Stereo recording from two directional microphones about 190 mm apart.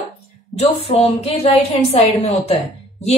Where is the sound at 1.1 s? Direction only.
35° left (ahead or behind).